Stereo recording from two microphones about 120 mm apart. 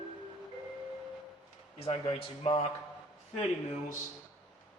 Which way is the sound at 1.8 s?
60° left (ahead or behind).